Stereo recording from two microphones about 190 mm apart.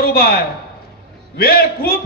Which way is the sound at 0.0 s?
55° left (ahead or behind).